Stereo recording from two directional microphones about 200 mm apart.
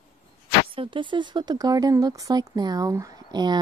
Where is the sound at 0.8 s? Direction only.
25° right (ahead or behind).